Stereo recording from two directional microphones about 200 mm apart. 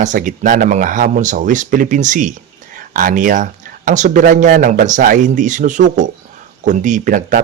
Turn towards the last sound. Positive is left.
turn(degrees=-40)  # may be behind; listen again after turning